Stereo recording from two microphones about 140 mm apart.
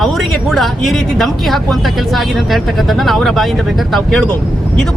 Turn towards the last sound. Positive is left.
turn(degrees=5)  # may be behind; listen again after turning